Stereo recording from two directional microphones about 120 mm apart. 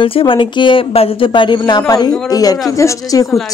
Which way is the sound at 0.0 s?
45° left (ahead or behind).